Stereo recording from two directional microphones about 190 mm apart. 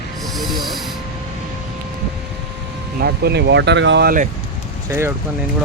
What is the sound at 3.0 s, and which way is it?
Speech, 55° right (ahead or behind).